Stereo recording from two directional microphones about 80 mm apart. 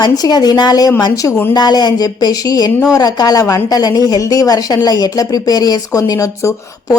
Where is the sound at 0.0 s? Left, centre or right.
Left.